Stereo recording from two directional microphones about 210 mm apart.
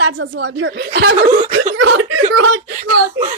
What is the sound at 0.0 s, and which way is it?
Speech, 60° right (ahead or behind).